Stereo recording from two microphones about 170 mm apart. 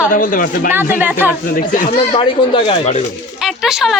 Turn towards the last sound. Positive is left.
turn(degrees=0)  # may be behind; listen again after turning